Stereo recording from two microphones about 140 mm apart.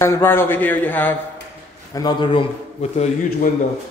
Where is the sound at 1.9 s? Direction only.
30° left (ahead or behind).